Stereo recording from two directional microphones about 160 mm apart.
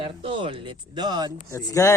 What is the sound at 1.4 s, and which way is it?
Speech, 20° left (ahead or behind).